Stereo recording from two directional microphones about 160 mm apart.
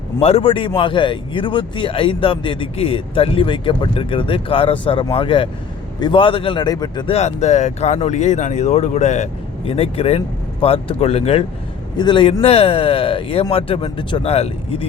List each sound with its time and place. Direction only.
0.2 s a man's voice: 40° left (ahead or behind)
7.1 s speech: 45° left (ahead or behind)